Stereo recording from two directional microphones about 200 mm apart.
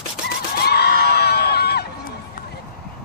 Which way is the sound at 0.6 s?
55° left (ahead or behind).